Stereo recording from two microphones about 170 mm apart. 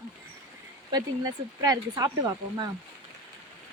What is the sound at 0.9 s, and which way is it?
Speech, 20° right (ahead or behind).